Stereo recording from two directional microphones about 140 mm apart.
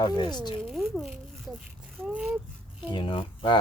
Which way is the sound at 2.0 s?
5° right (ahead or behind).